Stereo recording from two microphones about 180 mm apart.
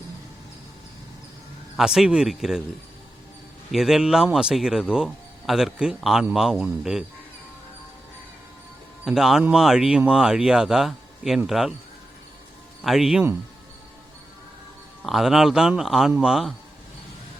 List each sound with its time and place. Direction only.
1.7 s speech: centre (ahead or behind)
3.7 s speech: centre (ahead or behind)
9.0 s speech: centre (ahead or behind)
12.8 s speech: centre (ahead or behind)
15.0 s speech: centre (ahead or behind)